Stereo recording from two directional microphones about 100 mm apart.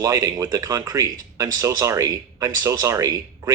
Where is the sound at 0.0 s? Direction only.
35° right (ahead or behind).